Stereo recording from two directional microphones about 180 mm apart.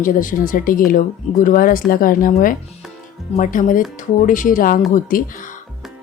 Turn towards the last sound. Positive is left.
turn(degrees=50)  # may be behind; listen again after turning